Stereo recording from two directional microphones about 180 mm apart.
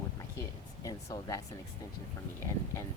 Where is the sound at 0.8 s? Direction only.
20° left (ahead or behind).